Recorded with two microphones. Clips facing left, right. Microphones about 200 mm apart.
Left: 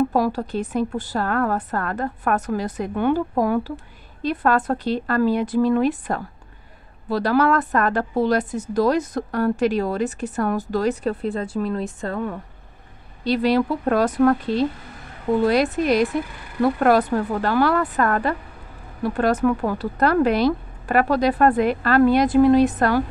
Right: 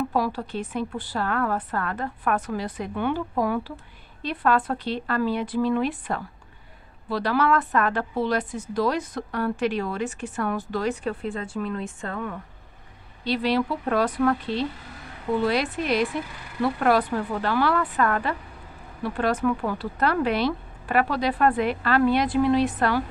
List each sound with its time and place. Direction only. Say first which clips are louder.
0.1 s a woman's voice: left 5 dB; 45° left (ahead or behind)